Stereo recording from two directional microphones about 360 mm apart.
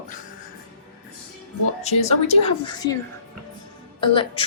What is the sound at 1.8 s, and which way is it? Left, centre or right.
Speech, centre.